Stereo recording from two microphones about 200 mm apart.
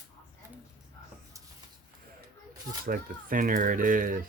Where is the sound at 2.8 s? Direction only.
45° right (ahead or behind).